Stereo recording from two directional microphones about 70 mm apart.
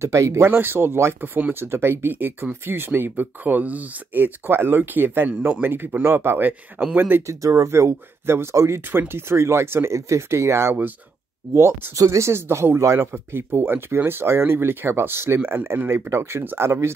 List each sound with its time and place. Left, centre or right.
0.0 s speech: right
0.5 s speech: right
7.2 s speech: right